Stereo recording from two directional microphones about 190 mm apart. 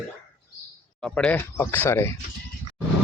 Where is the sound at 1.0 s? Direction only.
5° left (ahead or behind).